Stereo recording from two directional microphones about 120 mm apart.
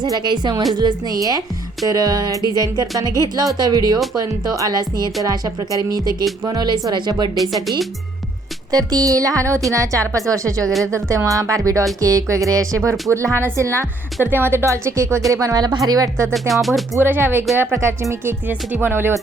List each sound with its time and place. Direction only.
0.0 s music: 40° right (ahead or behind)
8.9 s speech: 30° right (ahead or behind)
16.3 s music: centre (ahead or behind)
16.9 s speech: 20° right (ahead or behind)